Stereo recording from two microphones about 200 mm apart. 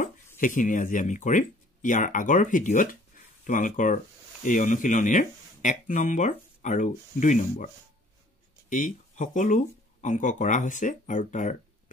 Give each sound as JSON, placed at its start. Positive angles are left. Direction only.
{"t": 0.0, "sound": "speech", "side_deg": 40}